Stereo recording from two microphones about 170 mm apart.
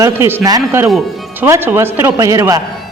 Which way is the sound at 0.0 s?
15° right (ahead or behind).